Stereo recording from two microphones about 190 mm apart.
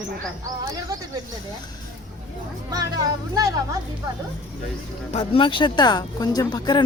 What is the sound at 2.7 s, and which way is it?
Speech, 20° right (ahead or behind).